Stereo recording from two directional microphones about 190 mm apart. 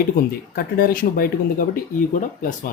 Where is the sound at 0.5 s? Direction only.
50° left (ahead or behind).